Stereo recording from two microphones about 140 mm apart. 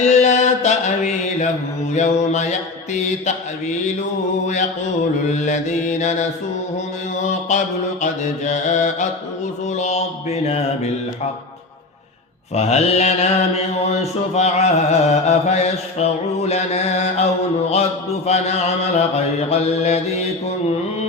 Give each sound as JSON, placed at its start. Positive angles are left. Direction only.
{"t": 0.0, "sound": "mantra", "side_deg": 55}
{"t": 5.3, "sound": "mantra", "side_deg": 55}
{"t": 12.5, "sound": "mantra", "side_deg": 50}
{"t": 18.3, "sound": "mantra", "side_deg": 50}